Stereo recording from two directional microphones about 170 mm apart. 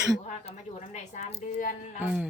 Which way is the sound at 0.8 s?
45° left (ahead or behind).